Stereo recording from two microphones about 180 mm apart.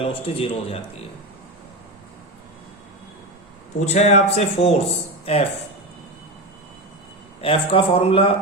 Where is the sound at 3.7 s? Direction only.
40° left (ahead or behind).